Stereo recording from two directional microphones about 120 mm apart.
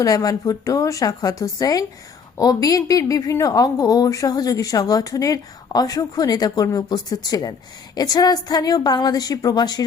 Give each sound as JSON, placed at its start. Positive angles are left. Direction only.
{"t": 0.0, "sound": "a woman's voice", "side_deg": 30}